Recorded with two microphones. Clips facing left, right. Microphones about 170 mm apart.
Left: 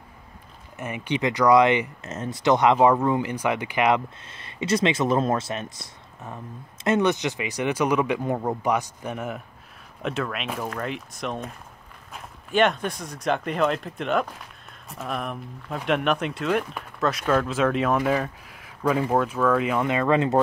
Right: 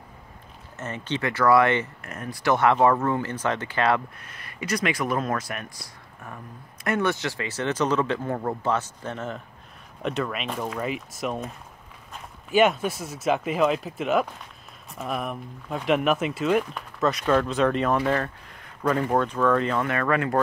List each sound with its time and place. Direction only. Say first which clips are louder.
0.7 s speech: left 2 dB; 10° left (ahead or behind)
10.0 s speech: even; centre (ahead or behind); by 20.3 s 20° left (ahead or behind)